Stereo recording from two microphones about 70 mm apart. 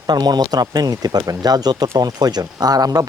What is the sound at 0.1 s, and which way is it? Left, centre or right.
Speech, right.